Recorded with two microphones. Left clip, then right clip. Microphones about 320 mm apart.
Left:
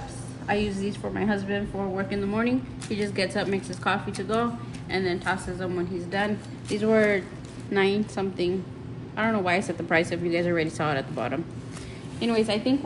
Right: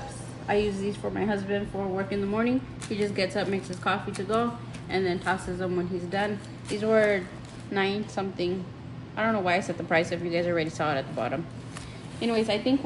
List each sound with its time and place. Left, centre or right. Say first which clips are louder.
0.5 s a woman's voice: right 1 dB; left